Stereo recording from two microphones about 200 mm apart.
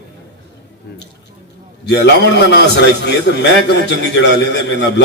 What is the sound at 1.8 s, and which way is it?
A man's voice, 60° left (ahead or behind).